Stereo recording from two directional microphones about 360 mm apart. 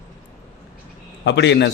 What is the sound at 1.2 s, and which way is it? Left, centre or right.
Speech, left.